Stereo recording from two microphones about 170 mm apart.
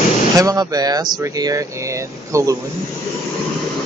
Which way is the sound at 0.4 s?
20° right (ahead or behind).